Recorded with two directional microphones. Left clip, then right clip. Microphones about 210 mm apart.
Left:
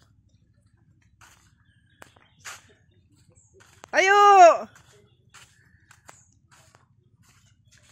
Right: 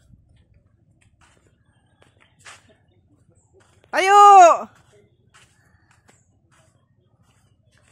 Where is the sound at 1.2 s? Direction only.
55° left (ahead or behind).